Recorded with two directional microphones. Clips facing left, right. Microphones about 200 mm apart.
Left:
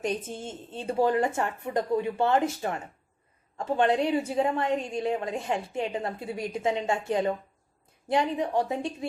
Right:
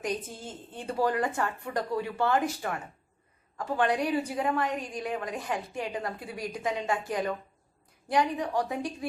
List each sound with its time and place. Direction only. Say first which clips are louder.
0.0 s a woman's voice: left 3 dB; 25° left (ahead or behind)